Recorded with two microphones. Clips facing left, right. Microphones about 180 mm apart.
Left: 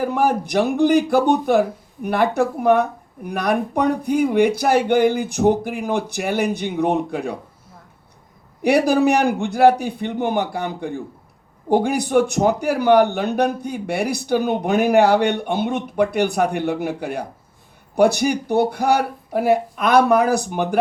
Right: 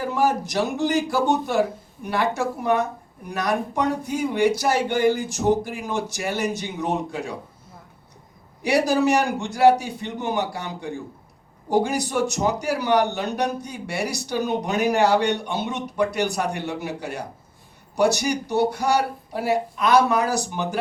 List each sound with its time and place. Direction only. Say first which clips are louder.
0.0 s a man's voice: left 3 dB; 55° left (ahead or behind)
8.6 s a man's voice: left 4 dB; 55° left (ahead or behind)